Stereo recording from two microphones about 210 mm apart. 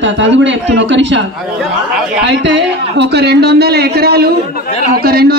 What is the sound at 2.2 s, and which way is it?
A man's voice, 55° right (ahead or behind).